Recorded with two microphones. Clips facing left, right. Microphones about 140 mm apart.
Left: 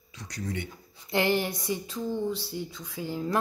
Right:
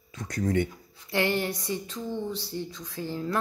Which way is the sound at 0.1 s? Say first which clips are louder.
Right 8 dB; 50° right (ahead or behind).